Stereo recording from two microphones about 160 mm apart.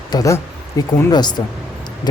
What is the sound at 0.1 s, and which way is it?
Speech, 20° left (ahead or behind).